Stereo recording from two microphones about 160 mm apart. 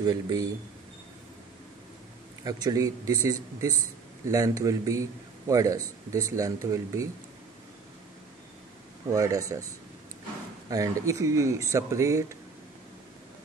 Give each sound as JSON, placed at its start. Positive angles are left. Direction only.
{"t": 0.0, "sound": "speech", "side_deg": -25}
{"t": 2.4, "sound": "speech", "side_deg": -25}
{"t": 9.1, "sound": "speech", "side_deg": -20}
{"t": 10.7, "sound": "speech", "side_deg": -20}